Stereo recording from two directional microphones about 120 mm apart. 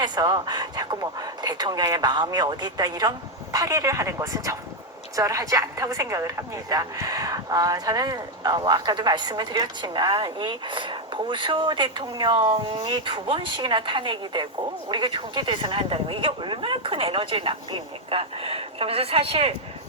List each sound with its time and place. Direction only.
0.0 s a woman's voice: 35° right (ahead or behind); by 19.5 s 55° right (ahead or behind)